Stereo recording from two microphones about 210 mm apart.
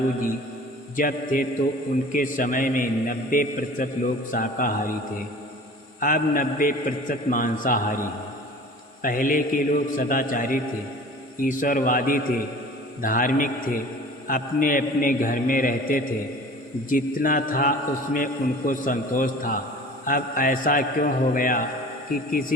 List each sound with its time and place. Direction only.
0.9 s a man's voice: 40° left (ahead or behind)
6.0 s a man's voice: 40° left (ahead or behind)
9.0 s a man's voice: 40° left (ahead or behind)